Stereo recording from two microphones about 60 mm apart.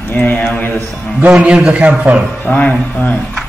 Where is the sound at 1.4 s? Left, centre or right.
Centre.